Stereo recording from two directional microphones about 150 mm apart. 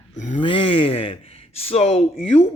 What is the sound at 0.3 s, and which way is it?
A man's voice, 35° left (ahead or behind).